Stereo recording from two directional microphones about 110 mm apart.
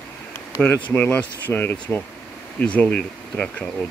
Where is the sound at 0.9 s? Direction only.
15° left (ahead or behind).